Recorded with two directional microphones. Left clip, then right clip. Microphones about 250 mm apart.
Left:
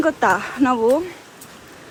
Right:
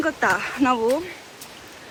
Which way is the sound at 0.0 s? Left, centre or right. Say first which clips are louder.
Left 4 dB; centre.